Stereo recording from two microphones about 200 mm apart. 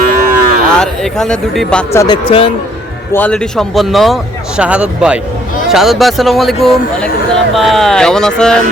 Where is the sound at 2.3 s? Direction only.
25° left (ahead or behind).